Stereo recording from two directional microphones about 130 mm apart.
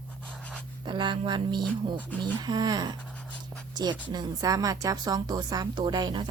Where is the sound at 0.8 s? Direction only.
35° right (ahead or behind).